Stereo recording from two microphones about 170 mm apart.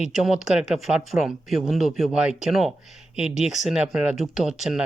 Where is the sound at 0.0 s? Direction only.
Centre (ahead or behind).